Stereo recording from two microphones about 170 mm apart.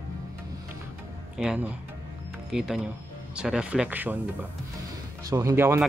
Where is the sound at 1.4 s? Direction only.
5° right (ahead or behind).